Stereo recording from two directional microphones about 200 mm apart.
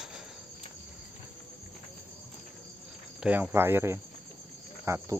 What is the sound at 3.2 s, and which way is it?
Speech, 5° right (ahead or behind).